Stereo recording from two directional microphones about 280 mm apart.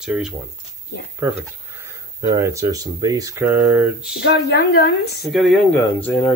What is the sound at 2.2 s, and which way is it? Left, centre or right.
Speech, centre.